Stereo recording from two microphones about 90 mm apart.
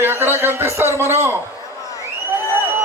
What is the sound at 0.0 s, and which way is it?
A man's voice, 25° right (ahead or behind).